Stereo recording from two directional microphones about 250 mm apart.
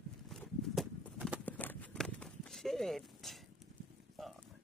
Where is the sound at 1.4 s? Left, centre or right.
Centre.